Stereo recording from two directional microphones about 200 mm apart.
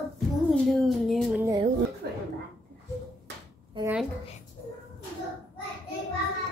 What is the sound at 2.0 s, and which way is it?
Speech, 50° right (ahead or behind).